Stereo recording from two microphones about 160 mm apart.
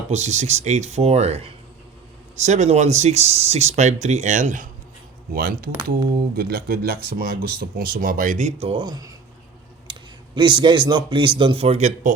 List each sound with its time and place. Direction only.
0.1 s speech: 45° right (ahead or behind)
5.3 s speech: 65° right (ahead or behind); by 12.1 s 50° right (ahead or behind)